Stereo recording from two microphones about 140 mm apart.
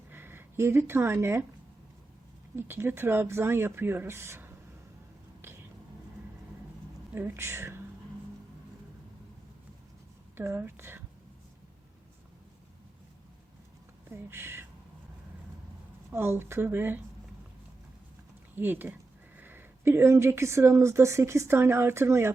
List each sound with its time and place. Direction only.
0.1 s speech: 15° right (ahead or behind)
2.6 s speech: 15° right (ahead or behind)
5.4 s a sound: 15° right (ahead or behind)
7.1 s speech: 15° right (ahead or behind)
10.3 s speech: 15° right (ahead or behind)
14.1 s speech: 15° right (ahead or behind)
16.1 s speech: 15° right (ahead or behind)
18.5 s a woman's voice: 15° right (ahead or behind)